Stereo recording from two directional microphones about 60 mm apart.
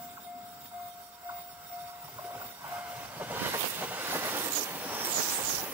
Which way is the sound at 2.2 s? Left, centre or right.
Right.